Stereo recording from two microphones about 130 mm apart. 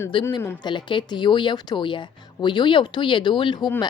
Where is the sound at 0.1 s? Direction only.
40° left (ahead or behind).